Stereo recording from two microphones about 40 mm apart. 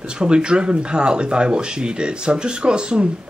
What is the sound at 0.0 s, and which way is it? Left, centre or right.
Speech, right.